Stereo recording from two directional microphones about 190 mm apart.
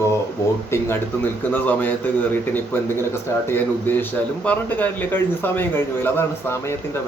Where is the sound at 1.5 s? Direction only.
10° left (ahead or behind).